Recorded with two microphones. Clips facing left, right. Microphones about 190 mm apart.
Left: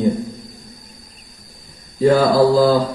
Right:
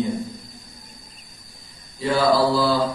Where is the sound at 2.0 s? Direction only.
50° left (ahead or behind).